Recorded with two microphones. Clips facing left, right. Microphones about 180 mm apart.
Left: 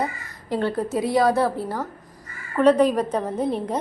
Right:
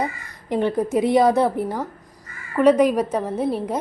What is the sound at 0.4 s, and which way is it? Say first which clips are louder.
A woman's voice: right 3 dB; 20° right (ahead or behind).